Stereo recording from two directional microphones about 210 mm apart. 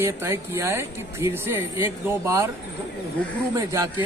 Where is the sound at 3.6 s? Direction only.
15° right (ahead or behind).